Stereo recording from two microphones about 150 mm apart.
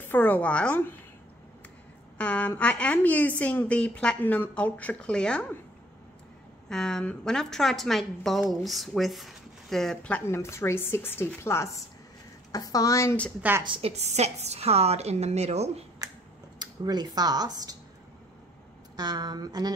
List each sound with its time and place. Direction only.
0.0 s a woman's voice: 10° left (ahead or behind)
2.1 s a woman's voice: 10° left (ahead or behind)
6.7 s a woman's voice: 5° left (ahead or behind); by 13.2 s 20° left (ahead or behind)
13.4 s a woman's voice: 15° right (ahead or behind)
13.7 s a woman's voice: 40° right (ahead or behind)
16.0 s finger snapping: 25° right (ahead or behind)
16.5 s speech: 30° right (ahead or behind)
18.9 s a woman's voice: 30° right (ahead or behind)